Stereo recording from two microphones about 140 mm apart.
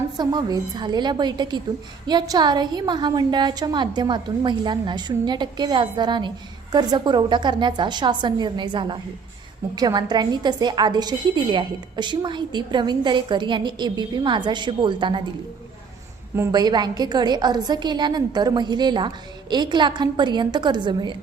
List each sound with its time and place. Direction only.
0.2 s a woman's voice: 30° right (ahead or behind)
16.5 s a woman's voice: 30° right (ahead or behind)